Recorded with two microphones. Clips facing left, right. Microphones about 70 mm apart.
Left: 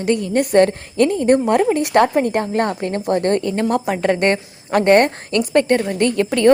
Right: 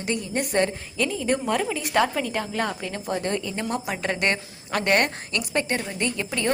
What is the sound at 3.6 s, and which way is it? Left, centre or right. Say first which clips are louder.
A woman's voice: left 9 dB; left.